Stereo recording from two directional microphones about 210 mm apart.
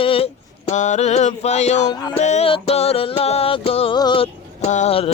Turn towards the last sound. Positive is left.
turn(degrees=30)  # may be behind; listen again after turning